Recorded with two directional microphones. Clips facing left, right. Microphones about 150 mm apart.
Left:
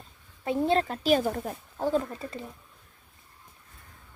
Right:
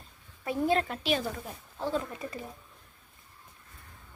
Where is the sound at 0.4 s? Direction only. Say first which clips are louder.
Left 3 dB; 25° left (ahead or behind); by 2.0 s 45° left (ahead or behind).